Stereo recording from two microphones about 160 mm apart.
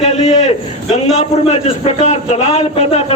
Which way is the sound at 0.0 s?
45° left (ahead or behind).